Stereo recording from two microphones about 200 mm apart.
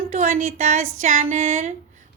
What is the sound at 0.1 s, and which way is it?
A woman's voice, 40° right (ahead or behind).